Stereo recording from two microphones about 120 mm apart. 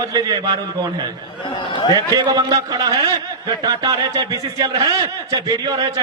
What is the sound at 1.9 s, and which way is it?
A man's voice, 35° right (ahead or behind).